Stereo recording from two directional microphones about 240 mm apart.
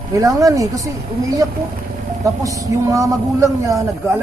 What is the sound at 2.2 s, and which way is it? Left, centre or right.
A man's voice, centre.